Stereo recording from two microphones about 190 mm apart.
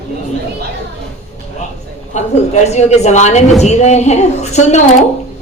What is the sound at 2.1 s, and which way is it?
Speech, 35° left (ahead or behind).